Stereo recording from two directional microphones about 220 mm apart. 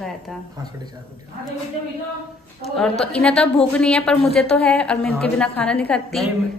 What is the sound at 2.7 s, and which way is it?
A woman's voice, centre (ahead or behind).